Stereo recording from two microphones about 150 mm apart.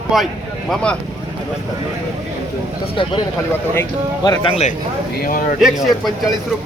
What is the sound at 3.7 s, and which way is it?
Speech, 20° left (ahead or behind).